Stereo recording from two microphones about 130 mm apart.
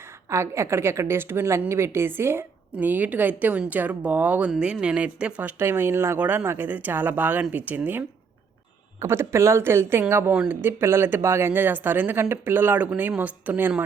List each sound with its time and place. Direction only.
0.3 s a woman's voice: 20° right (ahead or behind)